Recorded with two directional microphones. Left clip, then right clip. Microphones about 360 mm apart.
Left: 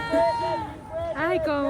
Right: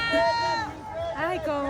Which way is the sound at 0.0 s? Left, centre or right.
Centre.